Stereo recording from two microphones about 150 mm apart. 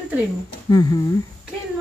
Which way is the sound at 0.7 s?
25° left (ahead or behind).